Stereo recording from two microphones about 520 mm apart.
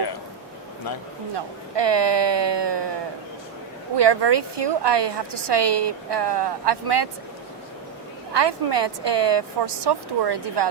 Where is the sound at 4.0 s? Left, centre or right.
Right.